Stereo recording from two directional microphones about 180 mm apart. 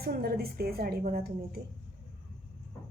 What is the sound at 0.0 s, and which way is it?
A woman's voice, 55° right (ahead or behind).